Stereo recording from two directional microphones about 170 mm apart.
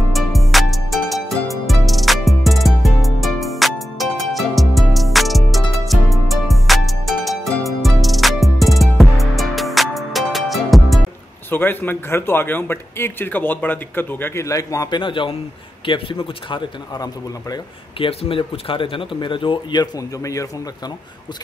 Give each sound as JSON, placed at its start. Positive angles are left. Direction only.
{"t": 0.1, "sound": "music", "side_deg": 0}
{"t": 11.5, "sound": "a man's voice", "side_deg": 10}